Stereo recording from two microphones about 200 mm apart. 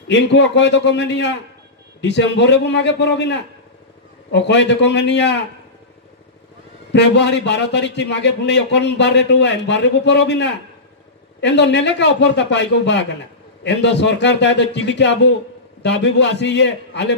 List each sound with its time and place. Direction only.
0.1 s a man's voice: 60° left (ahead or behind)
6.9 s a man's voice: 60° left (ahead or behind)